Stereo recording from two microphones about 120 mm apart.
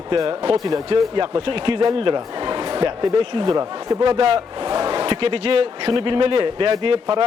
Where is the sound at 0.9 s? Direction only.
45° right (ahead or behind).